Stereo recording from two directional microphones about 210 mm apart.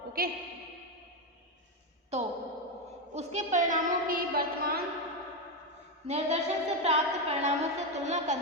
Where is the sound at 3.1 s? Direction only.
30° right (ahead or behind).